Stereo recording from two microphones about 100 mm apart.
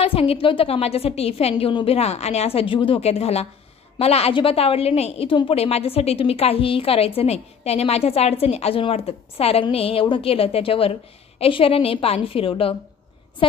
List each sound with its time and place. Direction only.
0.0 s a woman's voice: 75° left (ahead or behind); by 13.6 s 60° left (ahead or behind)